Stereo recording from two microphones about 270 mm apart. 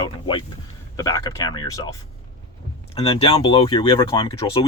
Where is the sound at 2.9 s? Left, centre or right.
Left.